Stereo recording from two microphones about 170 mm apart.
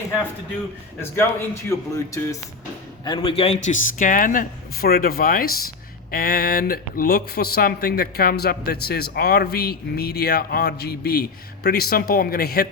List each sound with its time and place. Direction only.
0.9 s a man's voice: 15° left (ahead or behind)
3.0 s speech: 30° left (ahead or behind); by 12.6 s 65° left (ahead or behind)